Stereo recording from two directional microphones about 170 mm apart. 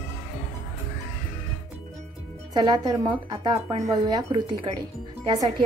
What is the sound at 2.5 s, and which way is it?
Speech, 25° right (ahead or behind).